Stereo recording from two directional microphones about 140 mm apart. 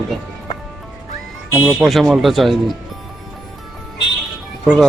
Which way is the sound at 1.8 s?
Centre (ahead or behind).